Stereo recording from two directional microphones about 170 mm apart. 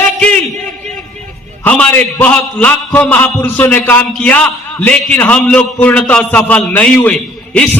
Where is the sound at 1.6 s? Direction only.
10° left (ahead or behind).